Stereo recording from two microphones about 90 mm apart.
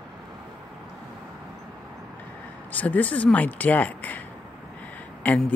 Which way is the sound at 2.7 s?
15° left (ahead or behind).